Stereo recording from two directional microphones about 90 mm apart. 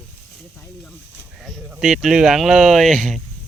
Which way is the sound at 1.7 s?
5° right (ahead or behind).